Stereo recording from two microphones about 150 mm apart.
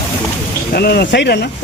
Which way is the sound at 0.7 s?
90° left.